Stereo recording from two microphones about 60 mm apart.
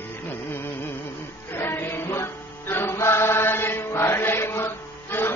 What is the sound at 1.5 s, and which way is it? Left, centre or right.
Music, left.